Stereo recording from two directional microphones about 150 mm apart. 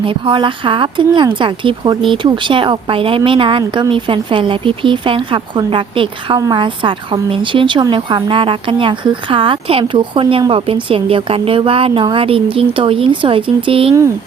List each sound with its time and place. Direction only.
0.0 s a woman's voice: 35° right (ahead or behind)